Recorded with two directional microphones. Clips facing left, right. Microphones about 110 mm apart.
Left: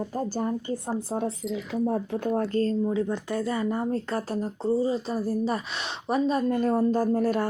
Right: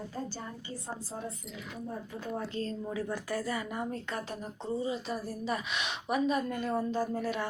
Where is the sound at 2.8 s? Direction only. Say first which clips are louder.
Left 9 dB; 20° left (ahead or behind).